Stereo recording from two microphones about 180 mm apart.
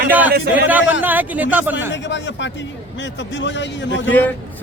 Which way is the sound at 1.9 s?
90° left.